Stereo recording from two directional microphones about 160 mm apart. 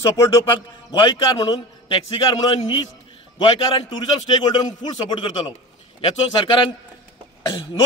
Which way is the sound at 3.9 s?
25° left (ahead or behind).